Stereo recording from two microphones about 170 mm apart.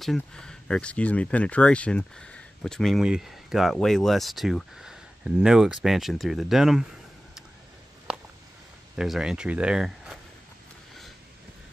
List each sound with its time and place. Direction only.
0.0 s speech: 5° left (ahead or behind)
8.9 s speech: 5° right (ahead or behind)